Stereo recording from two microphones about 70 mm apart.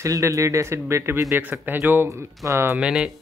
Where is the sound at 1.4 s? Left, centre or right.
Right.